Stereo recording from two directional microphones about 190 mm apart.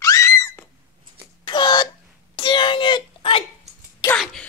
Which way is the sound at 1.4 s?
25° left (ahead or behind).